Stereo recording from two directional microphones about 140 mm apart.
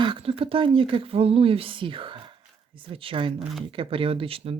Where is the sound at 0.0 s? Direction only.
40° right (ahead or behind).